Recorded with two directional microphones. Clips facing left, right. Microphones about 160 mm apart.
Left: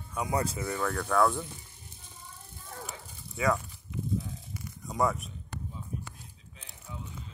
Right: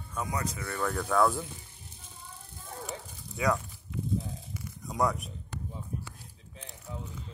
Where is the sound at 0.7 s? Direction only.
Centre (ahead or behind).